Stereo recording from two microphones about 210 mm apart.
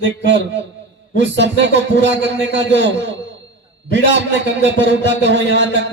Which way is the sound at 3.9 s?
55° right (ahead or behind).